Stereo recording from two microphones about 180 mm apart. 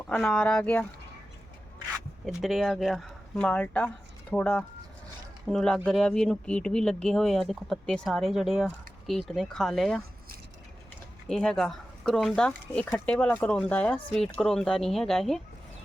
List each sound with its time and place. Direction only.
0.1 s speech: 5° left (ahead or behind)
2.2 s speech: centre (ahead or behind)
11.3 s speech: 5° left (ahead or behind)